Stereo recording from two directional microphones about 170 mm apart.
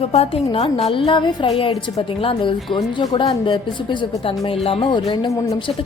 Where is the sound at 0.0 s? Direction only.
35° left (ahead or behind); by 5.6 s 20° left (ahead or behind).